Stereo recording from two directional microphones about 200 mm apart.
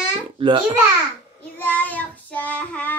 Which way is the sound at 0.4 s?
25° right (ahead or behind).